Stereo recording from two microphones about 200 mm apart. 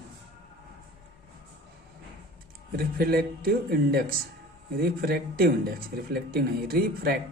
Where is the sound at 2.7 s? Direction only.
50° right (ahead or behind).